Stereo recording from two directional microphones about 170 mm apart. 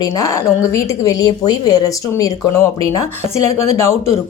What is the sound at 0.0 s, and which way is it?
A woman's voice, 20° left (ahead or behind).